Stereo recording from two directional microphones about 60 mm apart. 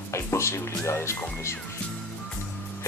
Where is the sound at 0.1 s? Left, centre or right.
Left.